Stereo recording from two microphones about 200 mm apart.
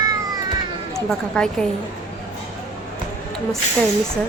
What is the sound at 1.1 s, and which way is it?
Speech, 5° left (ahead or behind).